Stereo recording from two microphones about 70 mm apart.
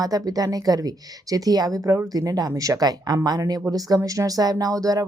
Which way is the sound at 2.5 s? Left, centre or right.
Right.